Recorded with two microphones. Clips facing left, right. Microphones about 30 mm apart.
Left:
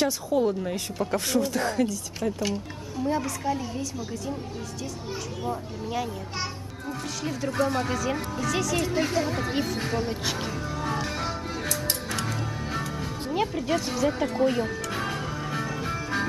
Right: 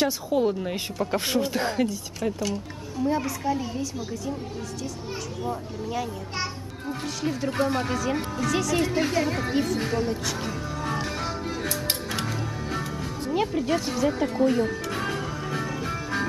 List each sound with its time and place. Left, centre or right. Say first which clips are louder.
0.0 s a woman's voice: right 1 dB; centre
3.0 s speech: right 2 dB; centre
5.5 s speech: even; centre
7.6 s speech: even; centre
9.5 s speech: right 2 dB; centre
10.0 s speech: right 1 dB; centre
10.8 s music: even; centre
13.3 s music: right 2 dB; centre